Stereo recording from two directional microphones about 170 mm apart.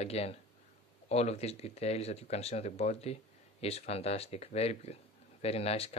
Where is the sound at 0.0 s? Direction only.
35° left (ahead or behind).